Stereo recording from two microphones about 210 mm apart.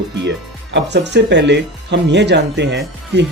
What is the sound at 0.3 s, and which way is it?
Speech, 55° right (ahead or behind).